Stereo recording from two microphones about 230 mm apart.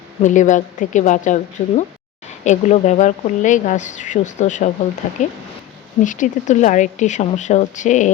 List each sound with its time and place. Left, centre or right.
0.2 s a woman's voice: left